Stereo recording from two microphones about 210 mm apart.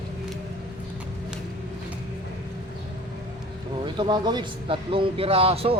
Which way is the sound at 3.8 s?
20° right (ahead or behind).